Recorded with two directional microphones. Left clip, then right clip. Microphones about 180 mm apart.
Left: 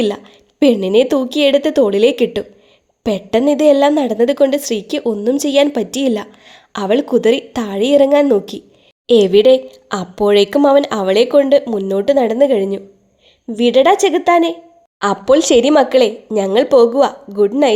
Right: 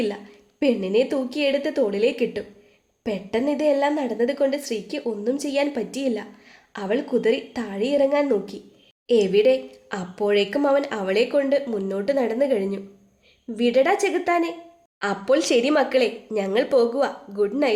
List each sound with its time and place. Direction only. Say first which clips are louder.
0.6 s a woman's voice: left 9 dB; 50° left (ahead or behind)